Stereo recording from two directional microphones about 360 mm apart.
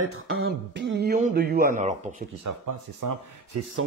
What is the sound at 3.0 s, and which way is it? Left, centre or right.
Speech, right.